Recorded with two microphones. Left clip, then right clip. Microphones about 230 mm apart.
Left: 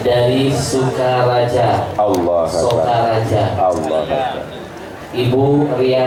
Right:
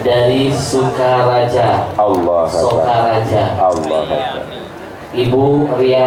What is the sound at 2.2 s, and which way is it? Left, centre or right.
Speech, left.